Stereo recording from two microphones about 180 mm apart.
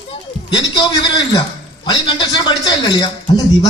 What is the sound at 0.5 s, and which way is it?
A man's voice, 25° left (ahead or behind).